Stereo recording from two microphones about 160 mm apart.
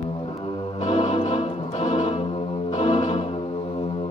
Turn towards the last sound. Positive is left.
turn(degrees=35)  # may be behind; listen again after turning